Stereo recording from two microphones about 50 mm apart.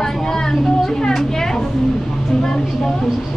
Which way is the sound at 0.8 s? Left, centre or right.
Centre.